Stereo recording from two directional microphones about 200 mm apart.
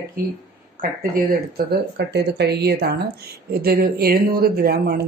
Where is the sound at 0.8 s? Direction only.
50° right (ahead or behind).